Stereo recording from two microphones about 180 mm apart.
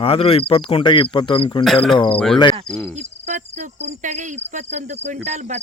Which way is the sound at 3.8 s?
40° right (ahead or behind).